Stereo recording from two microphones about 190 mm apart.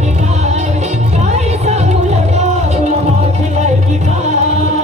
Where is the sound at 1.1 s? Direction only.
35° right (ahead or behind).